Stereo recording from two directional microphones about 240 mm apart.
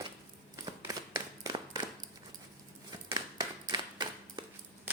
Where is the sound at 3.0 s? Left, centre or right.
Centre.